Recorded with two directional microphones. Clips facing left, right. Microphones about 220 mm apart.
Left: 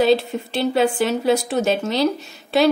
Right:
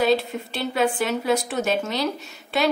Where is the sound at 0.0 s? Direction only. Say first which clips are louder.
Left 4 dB; 30° left (ahead or behind).